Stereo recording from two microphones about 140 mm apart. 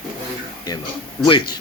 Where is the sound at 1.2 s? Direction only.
35° left (ahead or behind).